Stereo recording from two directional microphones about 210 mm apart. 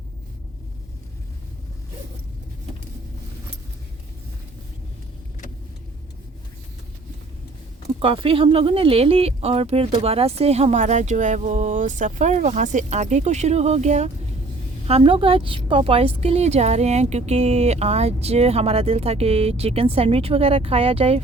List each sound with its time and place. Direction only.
7.9 s a woman's voice: 25° right (ahead or behind)